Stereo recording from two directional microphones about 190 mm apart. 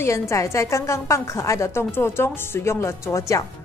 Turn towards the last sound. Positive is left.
turn(degrees=15)  # may be behind; listen again after turning